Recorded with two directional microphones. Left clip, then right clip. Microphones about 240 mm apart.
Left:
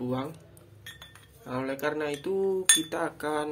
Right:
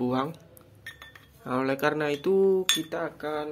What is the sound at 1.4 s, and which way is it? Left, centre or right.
Speech, centre.